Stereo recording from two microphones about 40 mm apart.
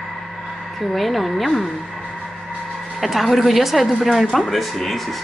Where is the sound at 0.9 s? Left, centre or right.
Centre.